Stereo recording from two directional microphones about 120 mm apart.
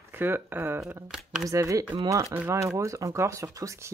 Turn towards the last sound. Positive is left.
turn(degrees=-25)  # may be behind; listen again after turning